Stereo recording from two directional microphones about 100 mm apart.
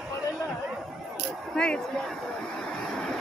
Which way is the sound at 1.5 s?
10° left (ahead or behind).